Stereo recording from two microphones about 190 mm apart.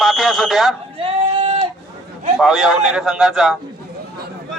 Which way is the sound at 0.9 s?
30° right (ahead or behind).